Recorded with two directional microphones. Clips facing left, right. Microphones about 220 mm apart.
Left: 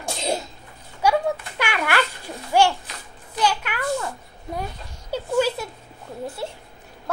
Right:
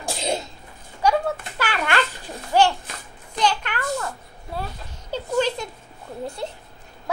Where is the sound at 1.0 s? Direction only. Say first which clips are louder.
Even; 10° left (ahead or behind).